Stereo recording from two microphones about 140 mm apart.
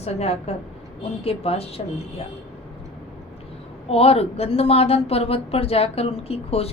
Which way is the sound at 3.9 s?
45° left (ahead or behind).